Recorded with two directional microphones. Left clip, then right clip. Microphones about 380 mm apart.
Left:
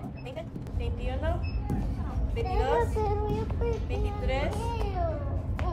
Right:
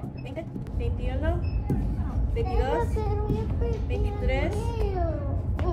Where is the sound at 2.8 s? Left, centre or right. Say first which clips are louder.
Left 2 dB; left.